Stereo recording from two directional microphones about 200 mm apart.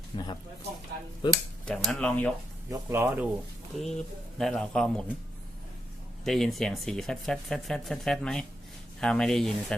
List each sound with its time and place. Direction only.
0.1 s speech: 25° left (ahead or behind)
1.6 s speech: 5° left (ahead or behind)
2.6 s speech: 10° right (ahead or behind)
3.8 s speech: centre (ahead or behind)
6.2 s speech: centre (ahead or behind)